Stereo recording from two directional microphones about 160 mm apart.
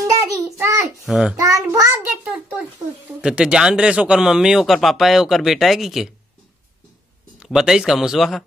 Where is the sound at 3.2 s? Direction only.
5° right (ahead or behind).